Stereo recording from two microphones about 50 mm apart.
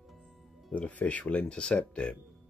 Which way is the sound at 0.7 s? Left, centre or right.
Left.